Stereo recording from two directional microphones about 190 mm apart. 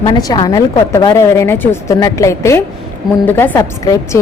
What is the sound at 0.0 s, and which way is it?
A woman's voice, 20° left (ahead or behind).